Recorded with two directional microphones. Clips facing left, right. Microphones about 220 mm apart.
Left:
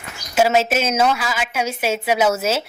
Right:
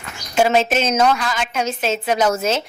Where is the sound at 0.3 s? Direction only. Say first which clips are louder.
Even; 5° left (ahead or behind).